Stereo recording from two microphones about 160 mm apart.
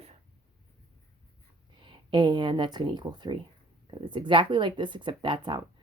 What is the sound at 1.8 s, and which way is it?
Speech, 30° right (ahead or behind).